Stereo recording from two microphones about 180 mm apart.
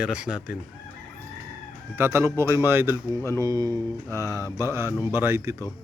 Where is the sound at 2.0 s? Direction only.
15° right (ahead or behind).